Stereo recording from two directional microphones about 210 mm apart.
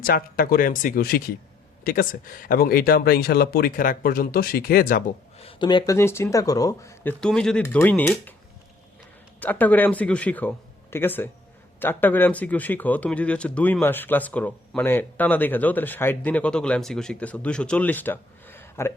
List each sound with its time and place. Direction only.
0.0 s speech: 45° left (ahead or behind)
5.4 s speech: 25° left (ahead or behind); by 8.3 s 10° left (ahead or behind)
9.4 s speech: 10° left (ahead or behind)